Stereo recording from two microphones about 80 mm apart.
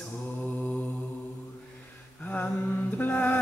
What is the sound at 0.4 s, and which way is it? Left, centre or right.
Mantra, centre.